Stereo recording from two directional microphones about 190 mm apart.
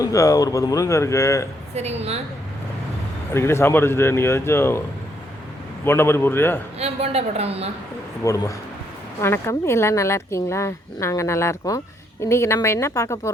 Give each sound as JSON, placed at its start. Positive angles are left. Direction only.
{"t": 0.0, "sound": "speech", "side_deg": 15}
{"t": 1.7, "sound": "a woman's voice", "side_deg": -35}
{"t": 3.3, "sound": "speech", "side_deg": 15}
{"t": 5.8, "sound": "speech", "side_deg": 10}
{"t": 6.7, "sound": "a woman's voice", "side_deg": -35}
{"t": 8.2, "sound": "speech", "side_deg": 15}